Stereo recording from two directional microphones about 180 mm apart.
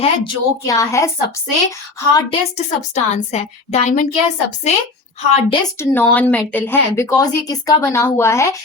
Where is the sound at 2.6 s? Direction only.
40° left (ahead or behind).